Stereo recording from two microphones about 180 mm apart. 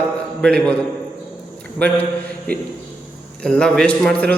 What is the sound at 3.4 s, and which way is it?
Speech, 5° left (ahead or behind).